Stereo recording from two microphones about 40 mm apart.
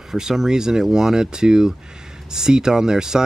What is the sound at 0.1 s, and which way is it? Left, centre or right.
Speech, centre.